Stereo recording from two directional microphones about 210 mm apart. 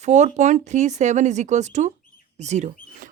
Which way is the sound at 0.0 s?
35° right (ahead or behind).